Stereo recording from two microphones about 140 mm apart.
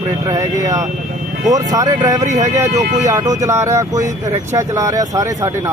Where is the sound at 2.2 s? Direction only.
55° right (ahead or behind).